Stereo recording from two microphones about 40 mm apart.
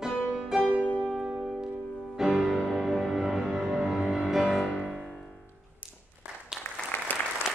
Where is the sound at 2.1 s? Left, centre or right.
Centre.